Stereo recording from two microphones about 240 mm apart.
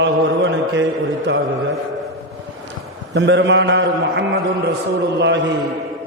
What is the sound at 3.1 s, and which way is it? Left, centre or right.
A man's voice, right.